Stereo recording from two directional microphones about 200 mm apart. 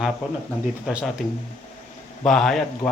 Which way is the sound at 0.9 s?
5° right (ahead or behind).